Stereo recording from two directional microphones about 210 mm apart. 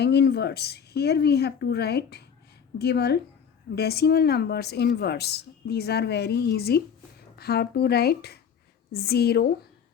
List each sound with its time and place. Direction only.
0.0 s a woman's voice: 50° left (ahead or behind)